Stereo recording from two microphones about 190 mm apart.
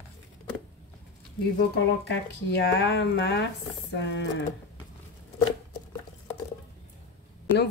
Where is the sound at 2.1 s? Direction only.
65° left (ahead or behind).